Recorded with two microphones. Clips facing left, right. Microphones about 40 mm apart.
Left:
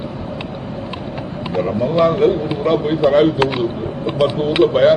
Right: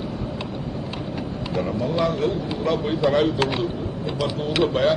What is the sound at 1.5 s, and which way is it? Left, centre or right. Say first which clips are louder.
A man's voice: left 7 dB; centre.